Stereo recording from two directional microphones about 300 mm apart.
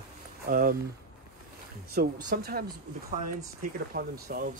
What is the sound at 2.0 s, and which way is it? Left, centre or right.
Speech, right.